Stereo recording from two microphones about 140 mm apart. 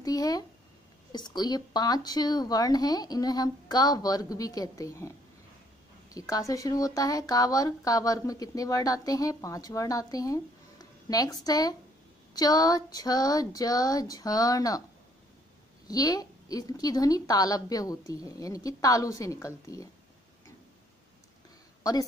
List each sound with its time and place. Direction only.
0.0 s speech: 25° left (ahead or behind)
15.9 s speech: 25° left (ahead or behind)